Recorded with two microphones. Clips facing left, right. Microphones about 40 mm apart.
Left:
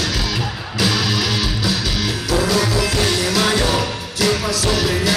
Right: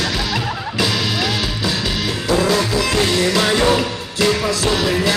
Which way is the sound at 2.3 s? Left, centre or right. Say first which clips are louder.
Right 2 dB; right.